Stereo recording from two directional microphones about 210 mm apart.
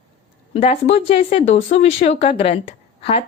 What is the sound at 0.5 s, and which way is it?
Speech, 30° left (ahead or behind).